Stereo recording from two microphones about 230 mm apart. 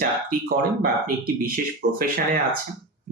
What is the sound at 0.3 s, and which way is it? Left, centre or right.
Speech, right.